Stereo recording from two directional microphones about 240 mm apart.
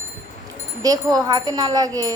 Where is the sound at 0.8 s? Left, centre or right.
Centre.